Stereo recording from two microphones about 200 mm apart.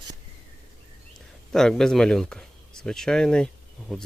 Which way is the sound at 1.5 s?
Centre (ahead or behind).